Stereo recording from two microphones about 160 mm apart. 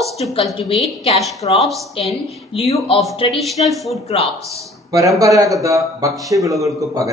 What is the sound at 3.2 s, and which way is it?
Speech, centre (ahead or behind).